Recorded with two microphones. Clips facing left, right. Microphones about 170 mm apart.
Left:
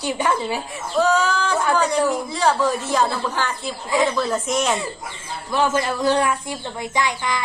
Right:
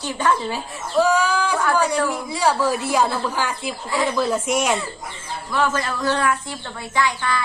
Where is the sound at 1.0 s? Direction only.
10° right (ahead or behind).